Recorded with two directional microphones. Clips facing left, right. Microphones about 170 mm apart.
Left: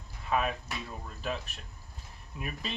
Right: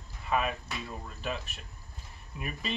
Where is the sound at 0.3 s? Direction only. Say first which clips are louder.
Even; centre (ahead or behind).